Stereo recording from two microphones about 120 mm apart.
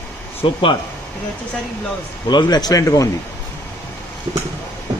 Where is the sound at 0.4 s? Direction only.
45° left (ahead or behind).